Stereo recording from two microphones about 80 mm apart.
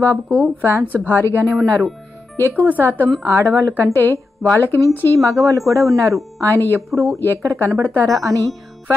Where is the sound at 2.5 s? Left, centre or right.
Right.